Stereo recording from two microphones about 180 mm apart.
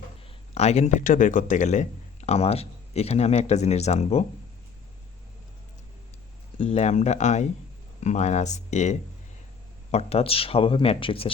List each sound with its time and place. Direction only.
0.5 s speech: 35° left (ahead or behind)
6.6 s speech: 35° left (ahead or behind)